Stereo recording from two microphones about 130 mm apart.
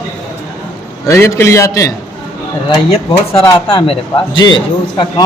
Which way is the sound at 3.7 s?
45° left (ahead or behind).